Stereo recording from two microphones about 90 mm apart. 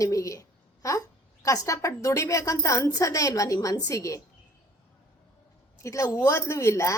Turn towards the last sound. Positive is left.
turn(degrees=35)  # may be behind; listen again after turning